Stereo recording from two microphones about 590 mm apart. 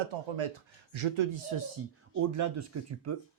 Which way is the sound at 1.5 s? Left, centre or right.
Right.